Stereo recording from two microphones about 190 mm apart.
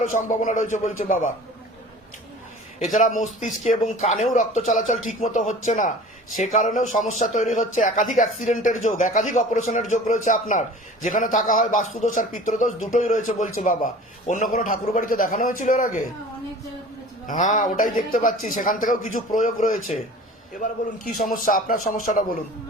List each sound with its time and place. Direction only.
0.0 s speech: 40° left (ahead or behind)
2.7 s a man's voice: 40° left (ahead or behind)
17.2 s a man's voice: 40° left (ahead or behind)